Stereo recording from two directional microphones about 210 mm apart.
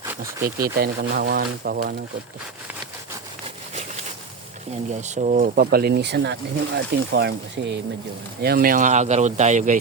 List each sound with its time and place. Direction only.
0.0 s speech: 15° right (ahead or behind)
0.8 s speech: 50° right (ahead or behind)
4.9 s speech: 35° right (ahead or behind)